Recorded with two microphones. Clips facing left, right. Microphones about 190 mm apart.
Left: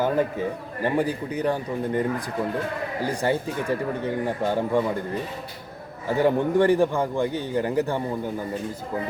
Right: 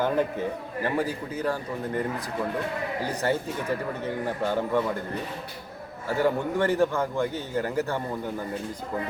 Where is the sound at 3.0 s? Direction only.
15° left (ahead or behind).